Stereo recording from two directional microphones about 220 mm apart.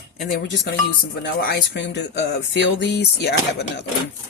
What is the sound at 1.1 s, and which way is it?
Speech, 45° left (ahead or behind).